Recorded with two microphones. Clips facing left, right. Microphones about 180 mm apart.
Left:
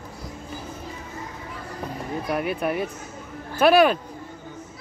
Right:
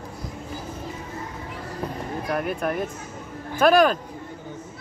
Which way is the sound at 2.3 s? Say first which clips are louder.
Left 1 dB; 5° left (ahead or behind).